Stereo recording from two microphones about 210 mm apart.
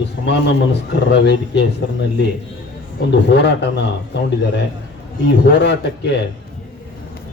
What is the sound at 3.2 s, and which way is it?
Speech, 55° left (ahead or behind).